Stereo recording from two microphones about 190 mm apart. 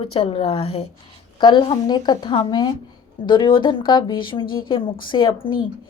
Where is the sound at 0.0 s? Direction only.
30° left (ahead or behind).